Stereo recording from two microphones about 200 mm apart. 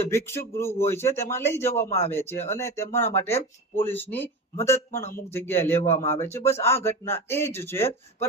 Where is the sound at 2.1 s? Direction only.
10° left (ahead or behind).